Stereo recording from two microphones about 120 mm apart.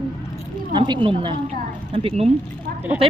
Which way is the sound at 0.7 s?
40° right (ahead or behind).